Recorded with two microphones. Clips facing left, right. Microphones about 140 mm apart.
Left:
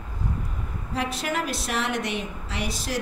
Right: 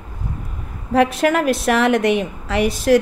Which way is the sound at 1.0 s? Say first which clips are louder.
Right 12 dB; 65° right (ahead or behind).